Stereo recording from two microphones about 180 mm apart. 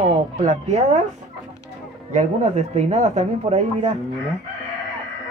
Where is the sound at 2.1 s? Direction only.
40° right (ahead or behind).